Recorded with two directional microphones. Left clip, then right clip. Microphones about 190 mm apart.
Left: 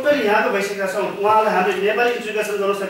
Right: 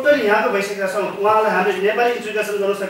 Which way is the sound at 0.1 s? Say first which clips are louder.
Right 1 dB; 5° left (ahead or behind).